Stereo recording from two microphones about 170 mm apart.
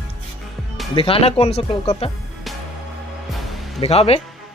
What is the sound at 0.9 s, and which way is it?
Speech, 30° left (ahead or behind).